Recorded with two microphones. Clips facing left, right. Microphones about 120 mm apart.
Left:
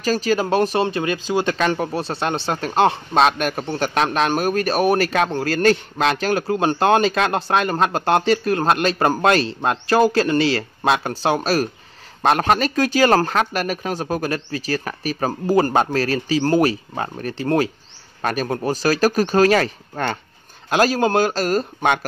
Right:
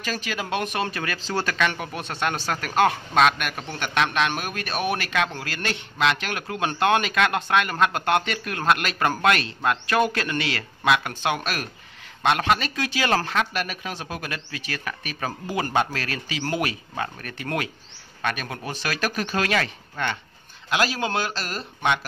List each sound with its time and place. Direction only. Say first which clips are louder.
0.0 s speech: left 11 dB; 35° left (ahead or behind); by 1.5 s 15° left (ahead or behind)
1.6 s speech: left 6 dB; 35° left (ahead or behind)